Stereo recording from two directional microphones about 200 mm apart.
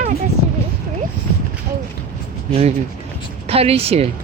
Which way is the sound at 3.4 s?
30° right (ahead or behind).